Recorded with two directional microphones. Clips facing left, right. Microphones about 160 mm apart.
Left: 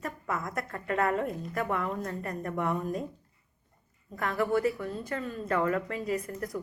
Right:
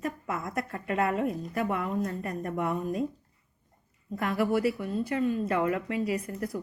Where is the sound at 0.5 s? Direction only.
20° right (ahead or behind).